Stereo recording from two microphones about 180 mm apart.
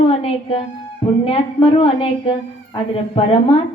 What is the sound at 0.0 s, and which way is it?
A woman's voice, 35° left (ahead or behind).